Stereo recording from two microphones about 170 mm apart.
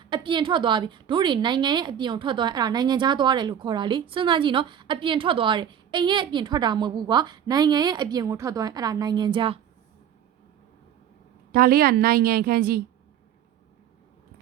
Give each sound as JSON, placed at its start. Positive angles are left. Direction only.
{"t": 0.0, "sound": "a woman's voice", "side_deg": -30}
{"t": 11.5, "sound": "a woman's voice", "side_deg": -60}